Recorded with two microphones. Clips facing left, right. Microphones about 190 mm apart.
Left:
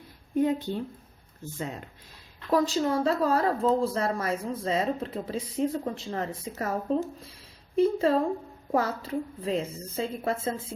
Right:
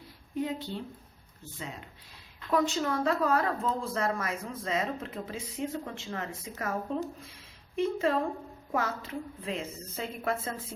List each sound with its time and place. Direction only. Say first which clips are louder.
0.3 s speech: left 8 dB; 50° left (ahead or behind)
2.5 s speech: left 4 dB; 35° left (ahead or behind)